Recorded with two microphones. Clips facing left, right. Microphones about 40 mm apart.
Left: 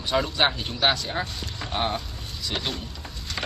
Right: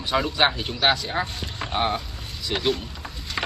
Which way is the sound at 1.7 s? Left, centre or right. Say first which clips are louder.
Right 3 dB; centre.